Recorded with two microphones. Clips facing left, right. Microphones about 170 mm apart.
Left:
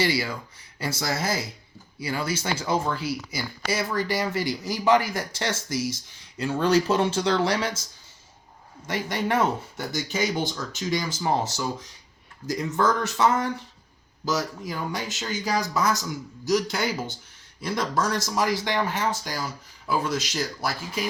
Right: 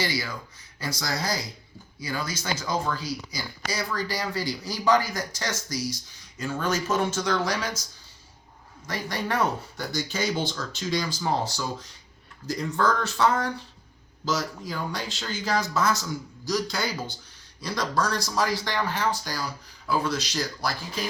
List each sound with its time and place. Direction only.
0.0 s speech: 30° left (ahead or behind)
8.9 s speech: 20° left (ahead or behind)